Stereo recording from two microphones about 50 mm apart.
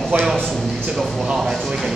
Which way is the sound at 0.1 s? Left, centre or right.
Right.